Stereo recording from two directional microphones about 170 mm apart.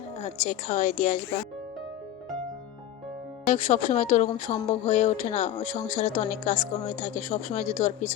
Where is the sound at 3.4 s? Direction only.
45° left (ahead or behind).